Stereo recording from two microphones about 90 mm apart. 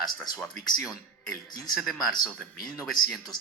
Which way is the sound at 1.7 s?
Centre (ahead or behind).